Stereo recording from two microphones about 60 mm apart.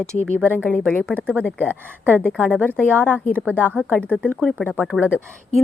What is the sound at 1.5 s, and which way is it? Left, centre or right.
A woman's voice, right.